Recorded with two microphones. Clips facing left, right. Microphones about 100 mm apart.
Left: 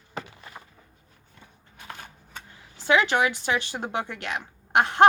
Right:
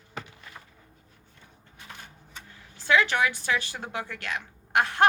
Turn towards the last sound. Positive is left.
turn(degrees=20)  # may be behind; listen again after turning